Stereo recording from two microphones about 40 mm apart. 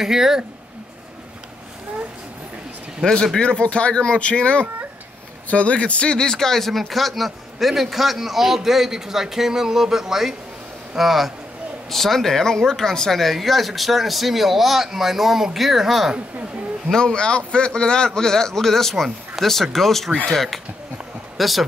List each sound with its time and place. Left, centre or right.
0.0 s speech: centre
3.3 s speech: left; by 11.3 s centre
11.9 s speech: centre
16.9 s a man's voice: left; by 21.6 s centre